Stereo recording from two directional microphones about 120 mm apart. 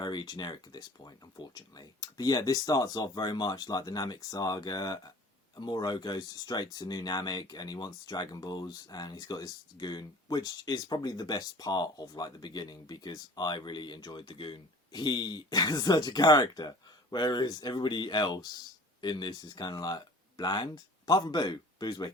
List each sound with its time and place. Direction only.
0.0 s speech: 40° left (ahead or behind)